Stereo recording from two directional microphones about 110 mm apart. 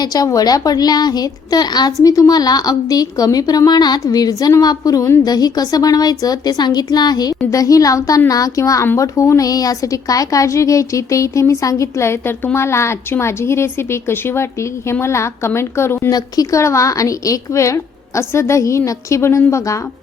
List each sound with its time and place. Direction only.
0.0 s a woman's voice: 35° left (ahead or behind)
16.0 s a woman's voice: 35° left (ahead or behind)